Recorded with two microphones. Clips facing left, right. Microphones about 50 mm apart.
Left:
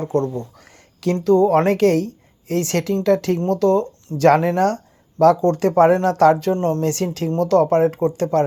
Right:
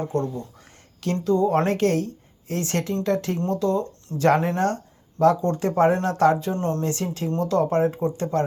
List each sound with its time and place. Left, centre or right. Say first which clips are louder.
0.1 s speech: left 5 dB; left
3.5 s speech: left 7 dB; left
4.4 s speech: left 5 dB; left
5.2 s speech: left 5 dB; left
7.3 s speech: left 6 dB; left
8.1 s speech: left 6 dB; left